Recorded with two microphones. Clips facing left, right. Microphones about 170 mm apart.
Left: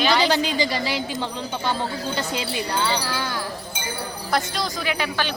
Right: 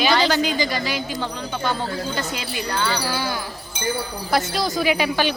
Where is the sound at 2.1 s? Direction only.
25° left (ahead or behind).